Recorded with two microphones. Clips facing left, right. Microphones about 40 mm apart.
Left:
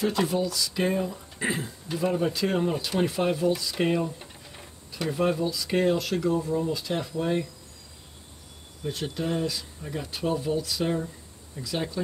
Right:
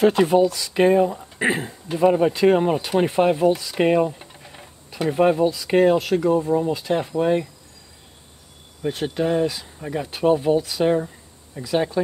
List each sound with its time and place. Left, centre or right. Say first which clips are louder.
0.0 s speech: right 10 dB; right
4.2 s a sound: right 3 dB; centre
5.2 s speech: right 8 dB; right
8.8 s speech: right 7 dB; right